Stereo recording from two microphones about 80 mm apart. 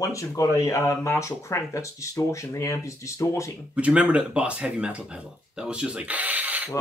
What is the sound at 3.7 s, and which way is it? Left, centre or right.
Speech, centre.